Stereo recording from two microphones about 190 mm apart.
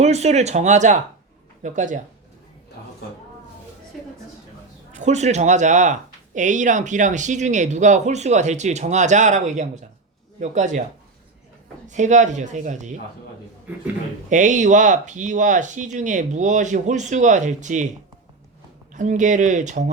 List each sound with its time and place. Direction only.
0.0 s speech: 35° right (ahead or behind)
4.9 s speech: 40° right (ahead or behind)
11.9 s speech: 40° right (ahead or behind)
14.3 s speech: 40° right (ahead or behind)
18.9 s speech: 40° right (ahead or behind)